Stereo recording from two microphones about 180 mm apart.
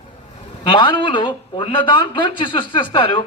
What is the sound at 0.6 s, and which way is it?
Speech, 25° left (ahead or behind).